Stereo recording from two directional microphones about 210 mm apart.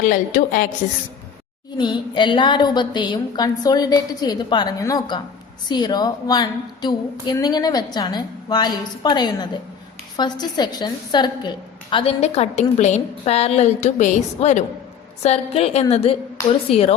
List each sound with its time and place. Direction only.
0.0 s a woman's voice: 40° left (ahead or behind)
1.8 s a woman's voice: 20° left (ahead or behind)